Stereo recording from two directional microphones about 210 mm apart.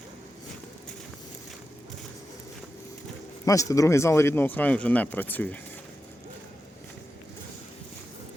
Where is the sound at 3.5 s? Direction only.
15° left (ahead or behind).